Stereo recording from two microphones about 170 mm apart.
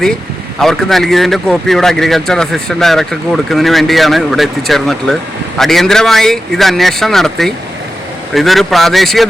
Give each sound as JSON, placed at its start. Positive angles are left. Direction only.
{"t": 0.6, "sound": "a man's voice", "side_deg": 0}